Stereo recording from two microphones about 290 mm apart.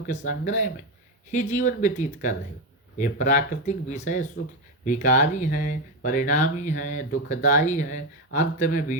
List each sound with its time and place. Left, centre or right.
0.4 s speech: left